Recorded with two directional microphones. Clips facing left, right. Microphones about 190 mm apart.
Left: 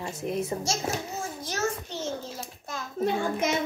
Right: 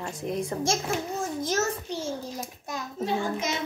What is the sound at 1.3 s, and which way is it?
Speech, 50° right (ahead or behind).